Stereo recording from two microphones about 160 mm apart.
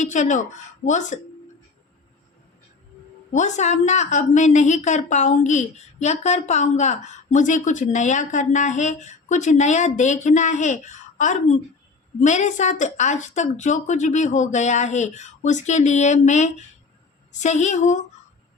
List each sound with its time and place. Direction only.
0.0 s a woman's voice: 50° left (ahead or behind)
3.3 s a woman's voice: 50° left (ahead or behind)